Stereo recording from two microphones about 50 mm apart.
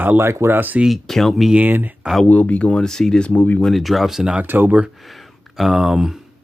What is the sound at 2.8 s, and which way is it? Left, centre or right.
Speech, centre.